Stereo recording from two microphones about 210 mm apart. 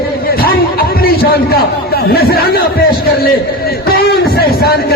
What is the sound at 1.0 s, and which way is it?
A man's voice, 45° left (ahead or behind).